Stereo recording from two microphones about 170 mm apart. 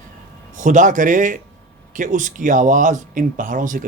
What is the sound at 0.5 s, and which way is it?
Speech, 50° right (ahead or behind).